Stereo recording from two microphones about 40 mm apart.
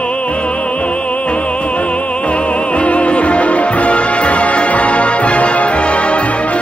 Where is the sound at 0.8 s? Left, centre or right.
Left.